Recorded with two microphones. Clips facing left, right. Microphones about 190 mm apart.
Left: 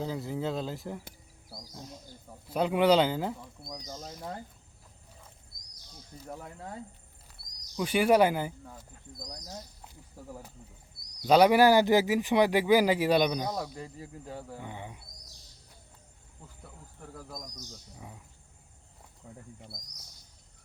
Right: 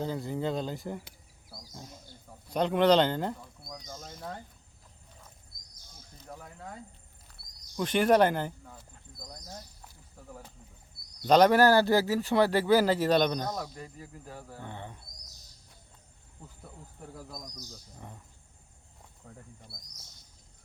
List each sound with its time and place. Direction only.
0.0 s speech: centre (ahead or behind)
3.6 s speech: 25° left (ahead or behind)
7.8 s speech: 10° left (ahead or behind)
9.8 s cricket: 20° left (ahead or behind)
11.3 s speech: 10° left (ahead or behind)
13.6 s speech: 25° left (ahead or behind)
14.6 s speech: 10° left (ahead or behind)
17.9 s speech: 5° left (ahead or behind)